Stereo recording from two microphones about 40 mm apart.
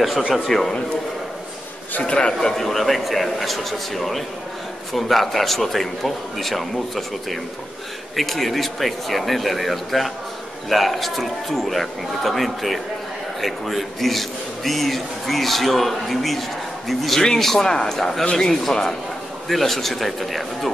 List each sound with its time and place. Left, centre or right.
0.5 s a man's voice: centre
2.0 s a man's voice: left
2.5 s a man's voice: centre